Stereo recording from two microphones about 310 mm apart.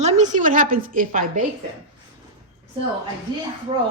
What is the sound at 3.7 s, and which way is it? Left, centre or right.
Speech, centre.